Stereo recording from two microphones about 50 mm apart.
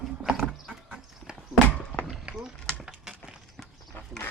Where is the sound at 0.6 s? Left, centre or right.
Centre.